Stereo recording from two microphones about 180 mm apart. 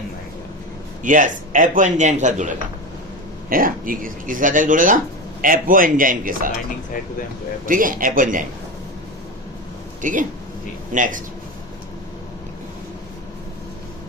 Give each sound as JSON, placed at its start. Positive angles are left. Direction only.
{"t": 1.0, "sound": "speech", "side_deg": -45}
{"t": 3.5, "sound": "speech", "side_deg": -50}
{"t": 7.7, "sound": "speech", "side_deg": -50}
{"t": 10.0, "sound": "speech", "side_deg": -45}